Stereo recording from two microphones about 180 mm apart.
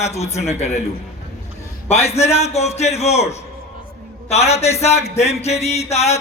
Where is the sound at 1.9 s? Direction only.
35° left (ahead or behind).